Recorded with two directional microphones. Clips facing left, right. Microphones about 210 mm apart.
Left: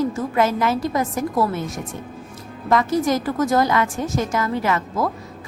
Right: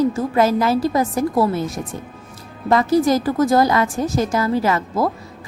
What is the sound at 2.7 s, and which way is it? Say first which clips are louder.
A woman's voice: right 3 dB; 35° right (ahead or behind).